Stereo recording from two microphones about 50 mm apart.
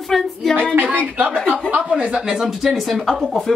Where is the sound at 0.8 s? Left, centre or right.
Right.